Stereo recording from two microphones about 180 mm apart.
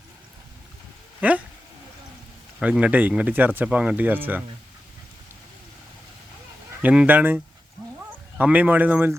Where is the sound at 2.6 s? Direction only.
5° right (ahead or behind).